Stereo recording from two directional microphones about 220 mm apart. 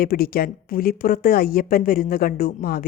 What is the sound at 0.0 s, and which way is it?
A woman's voice, 40° left (ahead or behind).